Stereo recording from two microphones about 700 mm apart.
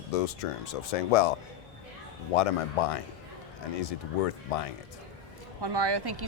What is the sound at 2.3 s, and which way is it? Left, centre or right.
Speech, left.